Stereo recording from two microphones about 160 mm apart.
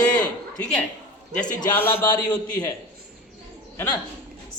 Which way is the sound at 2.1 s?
25° left (ahead or behind).